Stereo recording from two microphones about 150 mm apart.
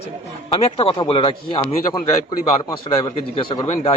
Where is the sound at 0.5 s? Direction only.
35° left (ahead or behind).